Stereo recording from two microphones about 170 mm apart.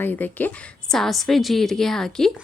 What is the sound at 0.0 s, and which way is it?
A woman's voice, 10° left (ahead or behind).